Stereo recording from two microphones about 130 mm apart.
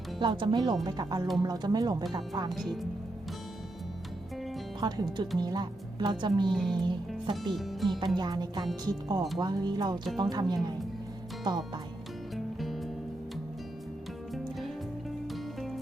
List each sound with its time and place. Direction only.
0.2 s speech: 40° right (ahead or behind)
4.8 s speech: 35° right (ahead or behind)
6.5 s music: centre (ahead or behind)
8.0 s speech: 35° right (ahead or behind)
12.5 s music: centre (ahead or behind)
15.3 s music: centre (ahead or behind)